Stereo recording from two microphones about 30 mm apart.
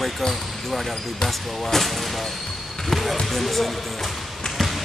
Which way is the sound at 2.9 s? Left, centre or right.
Centre.